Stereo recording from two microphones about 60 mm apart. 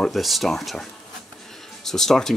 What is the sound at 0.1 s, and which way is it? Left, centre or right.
Speech, centre.